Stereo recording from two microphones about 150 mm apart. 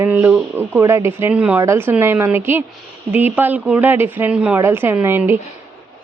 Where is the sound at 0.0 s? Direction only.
10° right (ahead or behind).